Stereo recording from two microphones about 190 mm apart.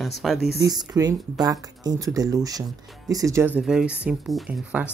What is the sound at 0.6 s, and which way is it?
Speech, 20° right (ahead or behind).